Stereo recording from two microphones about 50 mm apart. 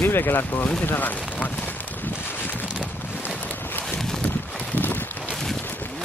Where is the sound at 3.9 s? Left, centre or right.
Centre.